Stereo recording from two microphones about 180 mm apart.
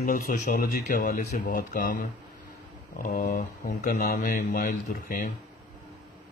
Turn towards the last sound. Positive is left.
turn(degrees=50)  # may be behind; listen again after turning